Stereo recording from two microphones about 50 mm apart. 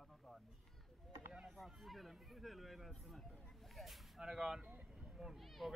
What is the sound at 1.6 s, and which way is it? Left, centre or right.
Speech, centre.